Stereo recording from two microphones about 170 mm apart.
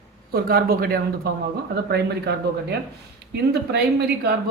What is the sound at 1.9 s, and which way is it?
A woman's voice, 80° right.